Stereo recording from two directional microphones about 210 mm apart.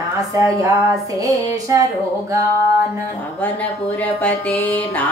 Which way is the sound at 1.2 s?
15° right (ahead or behind).